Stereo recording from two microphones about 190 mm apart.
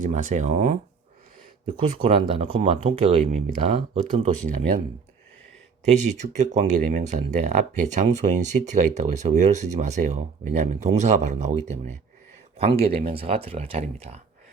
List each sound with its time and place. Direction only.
0.0 s speech: 40° right (ahead or behind)
1.6 s speech: 30° right (ahead or behind)
5.8 s speech: 35° right (ahead or behind)